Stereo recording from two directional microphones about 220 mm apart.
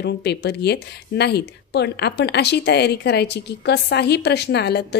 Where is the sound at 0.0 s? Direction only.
50° left (ahead or behind).